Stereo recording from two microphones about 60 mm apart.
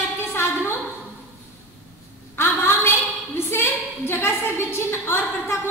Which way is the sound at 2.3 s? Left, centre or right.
Left.